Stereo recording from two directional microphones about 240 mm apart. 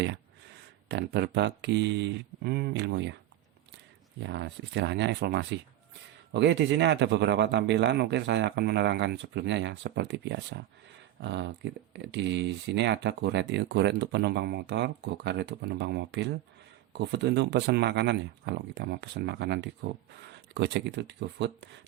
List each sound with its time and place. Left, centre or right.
0.9 s speech: right
4.2 s speech: right